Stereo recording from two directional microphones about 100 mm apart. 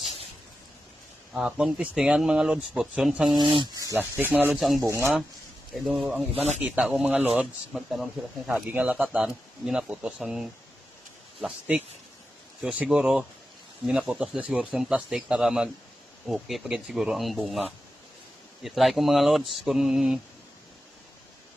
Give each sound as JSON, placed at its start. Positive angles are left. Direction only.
{"t": 1.3, "sound": "speech", "side_deg": -10}
{"t": 3.2, "sound": "speech", "side_deg": -50}
{"t": 3.9, "sound": "speech", "side_deg": -20}
{"t": 4.6, "sound": "speech", "side_deg": 0}
{"t": 4.9, "sound": "speech", "side_deg": -25}
{"t": 5.9, "sound": "speech", "side_deg": -10}
{"t": 8.7, "sound": "speech", "side_deg": -15}